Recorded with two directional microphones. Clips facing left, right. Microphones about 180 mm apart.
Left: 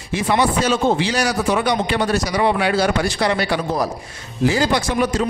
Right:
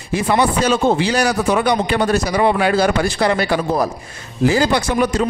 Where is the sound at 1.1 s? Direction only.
55° right (ahead or behind).